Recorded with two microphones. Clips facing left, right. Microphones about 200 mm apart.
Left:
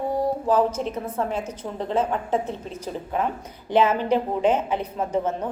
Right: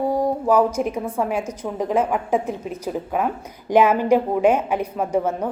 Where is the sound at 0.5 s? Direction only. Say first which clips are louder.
Right 4 dB; 10° right (ahead or behind).